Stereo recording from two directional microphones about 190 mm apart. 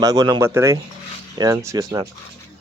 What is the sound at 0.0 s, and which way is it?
Speech, 20° right (ahead or behind).